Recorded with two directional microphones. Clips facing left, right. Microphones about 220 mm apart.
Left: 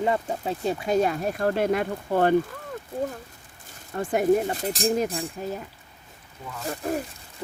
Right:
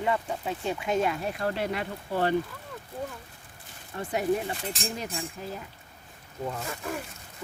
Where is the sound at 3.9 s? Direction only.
50° left (ahead or behind).